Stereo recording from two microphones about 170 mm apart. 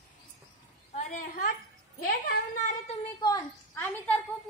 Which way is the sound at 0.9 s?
55° left (ahead or behind).